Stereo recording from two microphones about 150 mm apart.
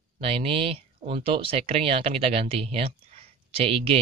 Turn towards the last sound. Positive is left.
turn(degrees=-40)  # may be behind; listen again after turning